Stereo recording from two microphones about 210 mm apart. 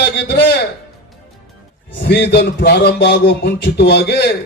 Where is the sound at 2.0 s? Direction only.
50° left (ahead or behind).